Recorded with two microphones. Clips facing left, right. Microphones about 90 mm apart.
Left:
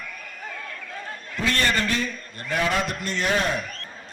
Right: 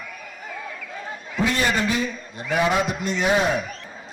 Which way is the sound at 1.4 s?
10° right (ahead or behind).